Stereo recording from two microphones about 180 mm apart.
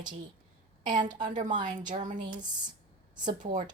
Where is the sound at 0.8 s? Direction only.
25° right (ahead or behind).